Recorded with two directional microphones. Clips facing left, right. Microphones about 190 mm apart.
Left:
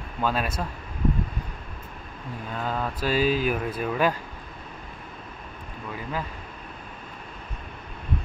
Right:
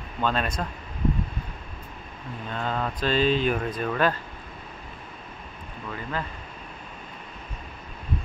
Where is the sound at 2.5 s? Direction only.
5° left (ahead or behind).